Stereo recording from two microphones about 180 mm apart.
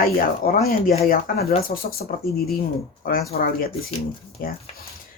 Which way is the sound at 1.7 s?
40° left (ahead or behind).